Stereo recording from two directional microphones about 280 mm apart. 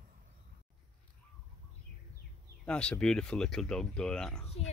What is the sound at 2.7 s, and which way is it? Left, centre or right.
Speech, centre.